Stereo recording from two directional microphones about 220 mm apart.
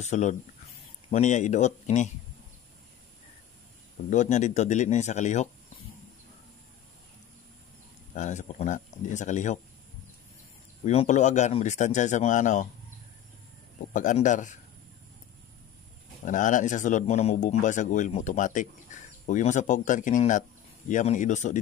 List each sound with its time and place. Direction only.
0.0 s a man's voice: 30° left (ahead or behind)
4.1 s a man's voice: 30° left (ahead or behind)
8.2 s a man's voice: 35° left (ahead or behind)
10.9 s a man's voice: 30° left (ahead or behind)
13.9 s a man's voice: 35° left (ahead or behind)
16.3 s a man's voice: 35° left (ahead or behind)